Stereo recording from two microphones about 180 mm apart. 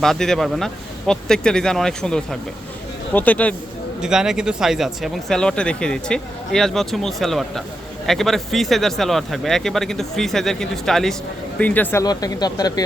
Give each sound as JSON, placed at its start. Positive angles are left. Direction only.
{"t": 0.0, "sound": "speech", "side_deg": 0}
{"t": 4.0, "sound": "speech", "side_deg": -5}